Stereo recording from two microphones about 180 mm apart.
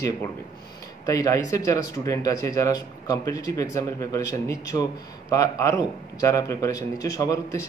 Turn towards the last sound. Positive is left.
turn(degrees=20)  # may be behind; listen again after turning